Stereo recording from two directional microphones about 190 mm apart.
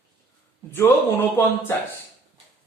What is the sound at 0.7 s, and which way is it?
Speech, 10° left (ahead or behind).